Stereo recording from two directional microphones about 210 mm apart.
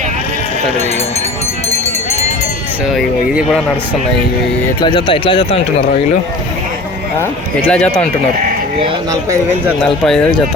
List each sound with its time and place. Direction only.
4.8 s speech: 20° left (ahead or behind)
7.7 s speech: 5° left (ahead or behind)